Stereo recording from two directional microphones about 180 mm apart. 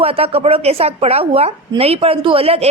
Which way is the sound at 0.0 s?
30° right (ahead or behind).